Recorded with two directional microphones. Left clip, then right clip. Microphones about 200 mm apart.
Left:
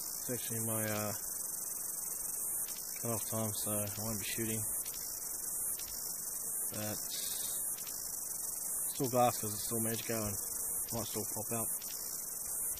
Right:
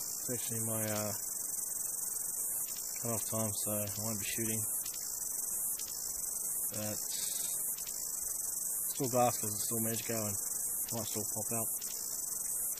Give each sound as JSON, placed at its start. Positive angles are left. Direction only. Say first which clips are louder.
{"t": 0.3, "sound": "speech", "louder": "even", "side_deg": 0}
{"t": 3.1, "sound": "speech", "louder": "right 1 dB", "side_deg": 0}
{"t": 6.8, "sound": "hum", "louder": "right 1 dB", "side_deg": 0}
{"t": 9.1, "sound": "speech", "louder": "even", "side_deg": 0}